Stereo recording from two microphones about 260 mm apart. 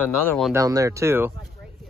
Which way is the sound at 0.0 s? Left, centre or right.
Centre.